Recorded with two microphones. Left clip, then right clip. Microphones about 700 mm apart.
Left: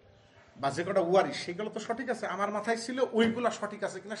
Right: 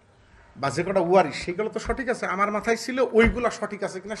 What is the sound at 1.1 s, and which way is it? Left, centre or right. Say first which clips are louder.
Speech: right 6 dB; right.